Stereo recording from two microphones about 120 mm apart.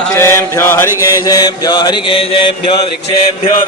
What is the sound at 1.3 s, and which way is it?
Mantra, 35° left (ahead or behind).